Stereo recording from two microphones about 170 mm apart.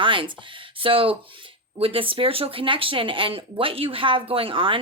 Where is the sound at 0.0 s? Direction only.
30° right (ahead or behind).